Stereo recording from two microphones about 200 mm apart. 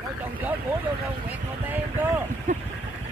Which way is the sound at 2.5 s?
40° right (ahead or behind).